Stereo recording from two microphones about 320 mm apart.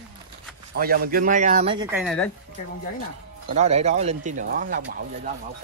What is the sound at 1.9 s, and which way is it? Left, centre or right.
Speech, centre.